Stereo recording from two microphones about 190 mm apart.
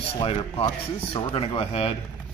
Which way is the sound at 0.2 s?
30° left (ahead or behind).